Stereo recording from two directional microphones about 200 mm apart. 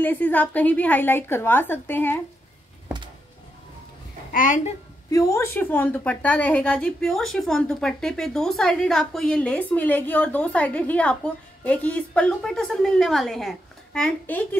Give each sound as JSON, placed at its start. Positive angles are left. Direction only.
{"t": 0.0, "sound": "a woman's voice", "side_deg": 10}
{"t": 4.3, "sound": "a woman's voice", "side_deg": 40}
{"t": 5.1, "sound": "a woman's voice", "side_deg": 15}